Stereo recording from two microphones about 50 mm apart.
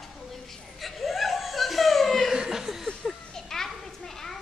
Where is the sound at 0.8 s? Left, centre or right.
Centre.